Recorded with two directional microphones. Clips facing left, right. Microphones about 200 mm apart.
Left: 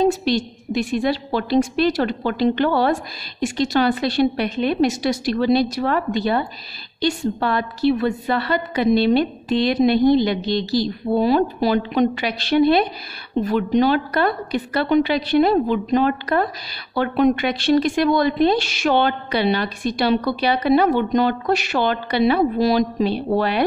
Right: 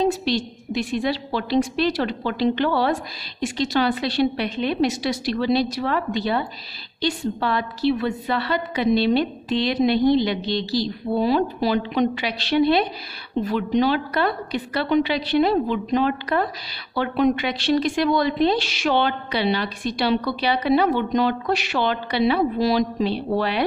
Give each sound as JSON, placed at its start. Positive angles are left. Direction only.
{"t": 0.0, "sound": "speech", "side_deg": 50}